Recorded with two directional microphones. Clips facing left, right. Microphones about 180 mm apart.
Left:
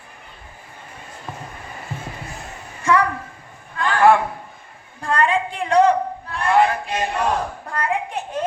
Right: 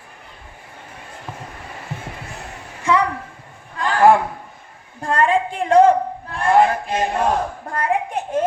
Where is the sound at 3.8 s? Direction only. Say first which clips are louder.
Right 1 dB; 35° right (ahead or behind).